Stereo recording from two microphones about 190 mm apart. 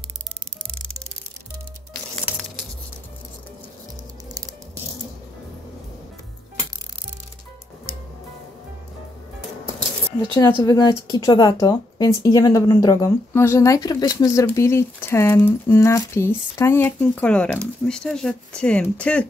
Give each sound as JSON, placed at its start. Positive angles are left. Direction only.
{"t": 10.6, "sound": "speech", "side_deg": 20}